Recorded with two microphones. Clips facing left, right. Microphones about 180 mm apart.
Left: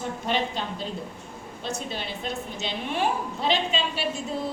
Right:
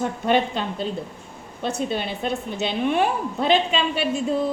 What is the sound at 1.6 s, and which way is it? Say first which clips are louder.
A woman's voice: right 7 dB; 55° right (ahead or behind).